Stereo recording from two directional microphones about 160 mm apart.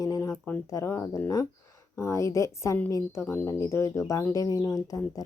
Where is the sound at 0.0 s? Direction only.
20° left (ahead or behind).